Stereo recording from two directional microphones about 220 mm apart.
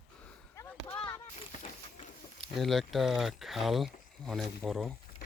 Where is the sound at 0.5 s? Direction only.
10° left (ahead or behind).